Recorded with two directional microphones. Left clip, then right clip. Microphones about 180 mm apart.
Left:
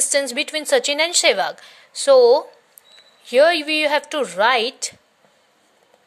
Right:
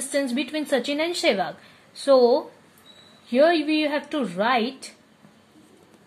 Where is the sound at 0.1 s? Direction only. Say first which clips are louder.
Left 3 dB; 45° left (ahead or behind).